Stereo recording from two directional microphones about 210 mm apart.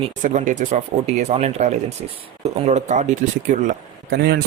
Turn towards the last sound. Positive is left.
turn(degrees=-50)  # may be behind; listen again after turning